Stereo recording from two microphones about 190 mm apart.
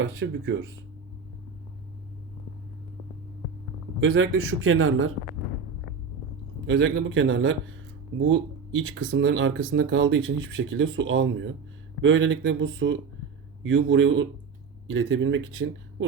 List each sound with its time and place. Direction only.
0.0 s speech: 90° right
4.0 s speech: 90° right
6.7 s a man's voice: 75° right (ahead or behind)
8.7 s a man's voice: 90° right
14.8 s speech: 90° right